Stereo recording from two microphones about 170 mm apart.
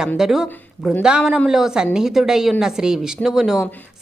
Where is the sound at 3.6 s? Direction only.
10° left (ahead or behind).